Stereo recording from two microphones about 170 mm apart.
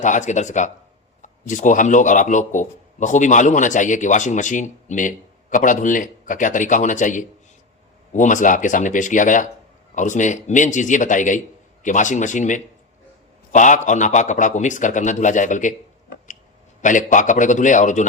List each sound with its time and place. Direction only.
0.0 s speech: 45° left (ahead or behind)
16.8 s speech: 50° left (ahead or behind)